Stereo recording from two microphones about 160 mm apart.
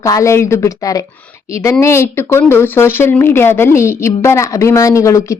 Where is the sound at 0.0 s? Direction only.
20° left (ahead or behind).